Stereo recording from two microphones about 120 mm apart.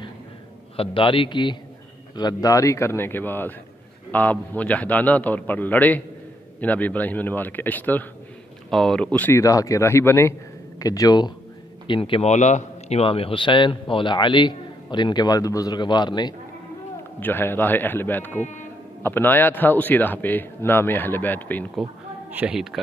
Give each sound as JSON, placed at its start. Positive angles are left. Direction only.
{"t": 0.7, "sound": "a man's voice", "side_deg": 45}
{"t": 8.6, "sound": "speech", "side_deg": 5}
{"t": 9.4, "sound": "a man's voice", "side_deg": 25}
{"t": 11.9, "sound": "a man's voice", "side_deg": 50}
{"t": 17.2, "sound": "speech", "side_deg": 15}
{"t": 22.3, "sound": "speech", "side_deg": -15}